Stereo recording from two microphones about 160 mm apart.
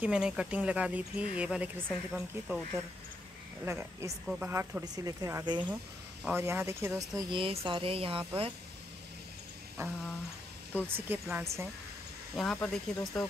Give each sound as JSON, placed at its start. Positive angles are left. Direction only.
{"t": 0.0, "sound": "speech", "side_deg": -5}
{"t": 3.6, "sound": "speech", "side_deg": -15}
{"t": 6.2, "sound": "speech", "side_deg": -15}
{"t": 10.8, "sound": "speech", "side_deg": -10}
{"t": 12.5, "sound": "speech", "side_deg": 5}